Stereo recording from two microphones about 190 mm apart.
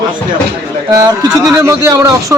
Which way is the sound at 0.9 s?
20° right (ahead or behind).